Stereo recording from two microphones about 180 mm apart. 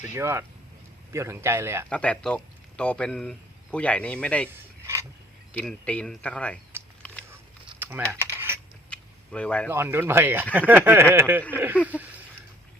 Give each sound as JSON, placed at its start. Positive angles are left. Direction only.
{"t": 0.0, "sound": "speech", "side_deg": -15}
{"t": 1.9, "sound": "speech", "side_deg": 5}
{"t": 4.5, "sound": "mechanisms", "side_deg": -15}
{"t": 5.5, "sound": "speech", "side_deg": 5}
{"t": 7.0, "sound": "biting", "side_deg": 5}
{"t": 7.8, "sound": "speech", "side_deg": -10}
{"t": 8.9, "sound": "a sound", "side_deg": 5}
{"t": 9.6, "sound": "speech", "side_deg": -10}
{"t": 11.9, "sound": "a sound", "side_deg": -10}